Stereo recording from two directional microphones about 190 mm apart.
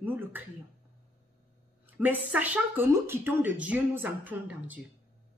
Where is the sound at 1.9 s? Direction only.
10° right (ahead or behind).